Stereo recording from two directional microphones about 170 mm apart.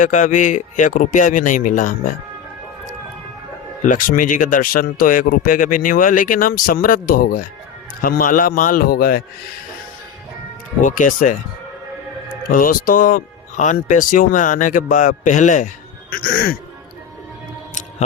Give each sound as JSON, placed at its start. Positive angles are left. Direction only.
{"t": 0.0, "sound": "speech", "side_deg": 50}
{"t": 3.8, "sound": "a man's voice", "side_deg": 50}
{"t": 10.8, "sound": "speech", "side_deg": 50}
{"t": 12.5, "sound": "speech", "side_deg": 55}